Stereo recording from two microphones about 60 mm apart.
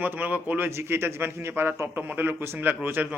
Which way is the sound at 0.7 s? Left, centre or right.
Right.